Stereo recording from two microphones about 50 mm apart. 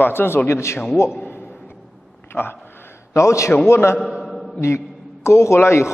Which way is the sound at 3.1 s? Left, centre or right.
Left.